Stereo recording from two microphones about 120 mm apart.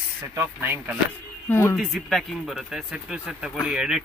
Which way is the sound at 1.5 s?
20° left (ahead or behind).